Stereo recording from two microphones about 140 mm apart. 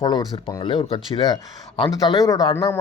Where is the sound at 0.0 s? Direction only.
35° left (ahead or behind).